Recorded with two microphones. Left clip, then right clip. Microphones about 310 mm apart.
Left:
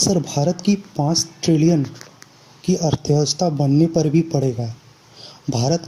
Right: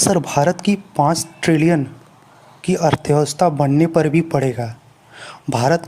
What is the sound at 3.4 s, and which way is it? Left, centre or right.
Speech, right.